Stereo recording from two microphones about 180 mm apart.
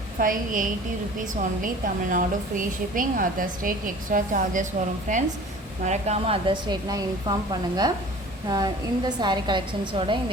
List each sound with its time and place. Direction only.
0.2 s a woman's voice: 50° right (ahead or behind); by 7.3 s 20° right (ahead or behind)
8.4 s a woman's voice: 20° right (ahead or behind)